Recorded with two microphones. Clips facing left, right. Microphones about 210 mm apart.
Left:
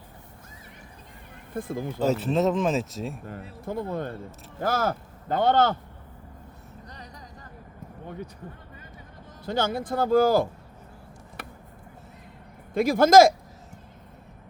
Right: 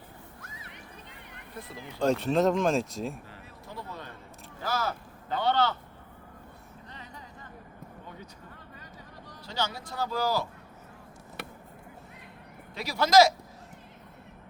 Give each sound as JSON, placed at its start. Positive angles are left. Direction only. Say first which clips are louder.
{"t": 0.4, "sound": "a sound", "louder": "even", "side_deg": -75}
{"t": 1.5, "sound": "speech", "louder": "left 12 dB", "side_deg": 50}
{"t": 2.0, "sound": "speech", "louder": "left 1 dB", "side_deg": 5}
{"t": 3.7, "sound": "speech", "louder": "left 12 dB", "side_deg": 50}
{"t": 9.5, "sound": "speech", "louder": "left 8 dB", "side_deg": 50}
{"t": 12.7, "sound": "speech", "louder": "left 6 dB", "side_deg": 50}